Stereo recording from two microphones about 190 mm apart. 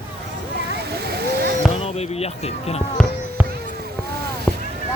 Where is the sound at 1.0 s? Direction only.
55° right (ahead or behind).